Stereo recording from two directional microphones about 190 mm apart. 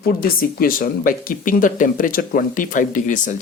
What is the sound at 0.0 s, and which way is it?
Speech, 50° left (ahead or behind).